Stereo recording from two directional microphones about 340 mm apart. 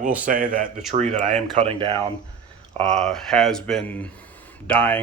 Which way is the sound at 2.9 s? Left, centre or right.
Centre.